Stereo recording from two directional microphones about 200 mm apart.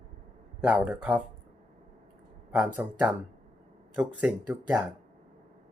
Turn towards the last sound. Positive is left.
turn(degrees=-10)  # may be behind; listen again after turning